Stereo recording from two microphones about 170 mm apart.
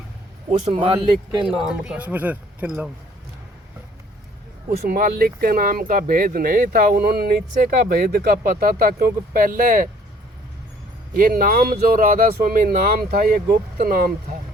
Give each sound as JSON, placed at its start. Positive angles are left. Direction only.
{"t": 0.6, "sound": "a man's voice", "side_deg": -35}
{"t": 1.5, "sound": "speech", "side_deg": -5}
{"t": 4.7, "sound": "speech", "side_deg": -60}
{"t": 11.1, "sound": "speech", "side_deg": -55}